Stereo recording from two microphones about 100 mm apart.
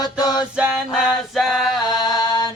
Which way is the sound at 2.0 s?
40° left (ahead or behind).